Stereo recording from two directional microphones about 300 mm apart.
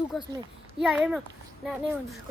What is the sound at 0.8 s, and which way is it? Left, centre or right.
Speech, centre.